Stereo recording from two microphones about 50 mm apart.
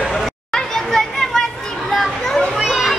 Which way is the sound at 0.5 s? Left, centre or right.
Centre.